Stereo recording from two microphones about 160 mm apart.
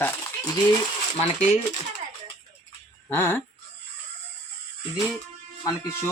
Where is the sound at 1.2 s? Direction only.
45° left (ahead or behind).